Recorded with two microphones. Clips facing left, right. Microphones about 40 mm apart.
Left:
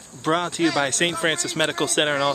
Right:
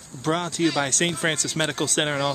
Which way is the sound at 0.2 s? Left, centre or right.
Left.